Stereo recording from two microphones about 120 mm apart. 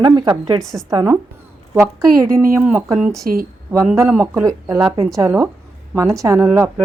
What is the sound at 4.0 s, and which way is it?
Speech, 20° right (ahead or behind).